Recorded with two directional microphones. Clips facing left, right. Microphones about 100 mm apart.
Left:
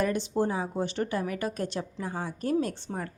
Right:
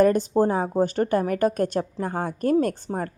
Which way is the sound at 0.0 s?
45° right (ahead or behind).